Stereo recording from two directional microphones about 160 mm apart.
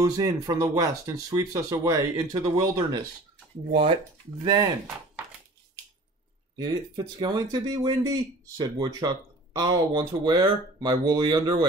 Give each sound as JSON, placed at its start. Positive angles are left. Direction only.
{"t": 0.0, "sound": "speech", "side_deg": -25}
{"t": 3.7, "sound": "speech", "side_deg": -35}
{"t": 6.5, "sound": "speech", "side_deg": -25}